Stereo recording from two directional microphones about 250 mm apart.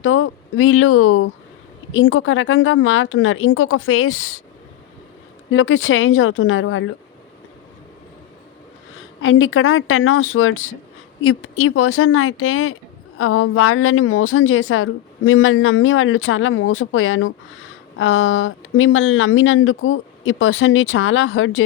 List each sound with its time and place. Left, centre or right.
0.0 s a woman's voice: left
5.5 s speech: left
9.2 s a woman's voice: left